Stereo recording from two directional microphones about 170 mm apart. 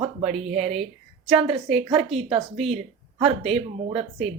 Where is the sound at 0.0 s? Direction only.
40° right (ahead or behind).